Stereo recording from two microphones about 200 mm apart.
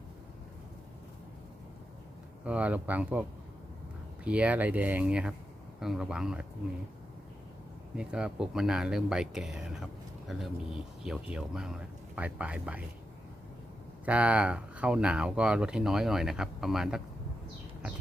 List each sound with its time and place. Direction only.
2.4 s speech: 5° right (ahead or behind)
7.9 s speech: 5° right (ahead or behind)
14.0 s speech: 5° right (ahead or behind)